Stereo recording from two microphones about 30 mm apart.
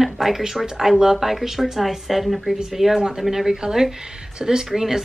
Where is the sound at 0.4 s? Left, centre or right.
Centre.